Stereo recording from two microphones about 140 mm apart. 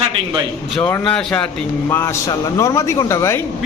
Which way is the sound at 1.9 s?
20° left (ahead or behind).